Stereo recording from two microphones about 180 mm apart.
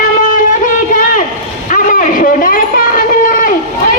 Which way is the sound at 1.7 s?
50° left (ahead or behind).